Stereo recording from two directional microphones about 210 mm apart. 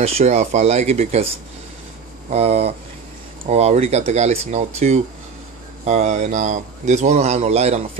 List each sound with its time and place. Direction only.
0.0 s speech: 30° right (ahead or behind)